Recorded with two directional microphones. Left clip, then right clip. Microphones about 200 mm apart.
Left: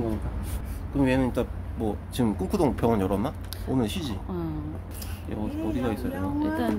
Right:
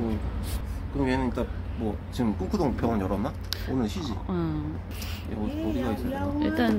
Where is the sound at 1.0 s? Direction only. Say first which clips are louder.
Left 3 dB; 50° left (ahead or behind).